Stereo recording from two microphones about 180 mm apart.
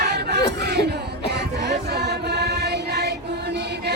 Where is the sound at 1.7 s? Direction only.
65° right (ahead or behind).